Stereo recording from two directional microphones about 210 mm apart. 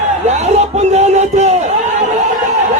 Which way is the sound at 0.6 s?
30° right (ahead or behind).